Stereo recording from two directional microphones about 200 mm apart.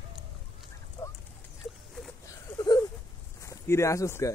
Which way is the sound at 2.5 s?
20° left (ahead or behind).